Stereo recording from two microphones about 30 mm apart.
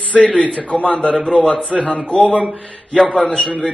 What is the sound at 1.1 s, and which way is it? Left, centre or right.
Speech, left.